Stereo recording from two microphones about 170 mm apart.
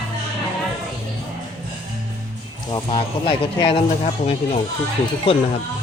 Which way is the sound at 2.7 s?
30° left (ahead or behind).